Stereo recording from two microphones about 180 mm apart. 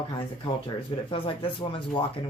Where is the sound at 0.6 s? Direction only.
30° left (ahead or behind).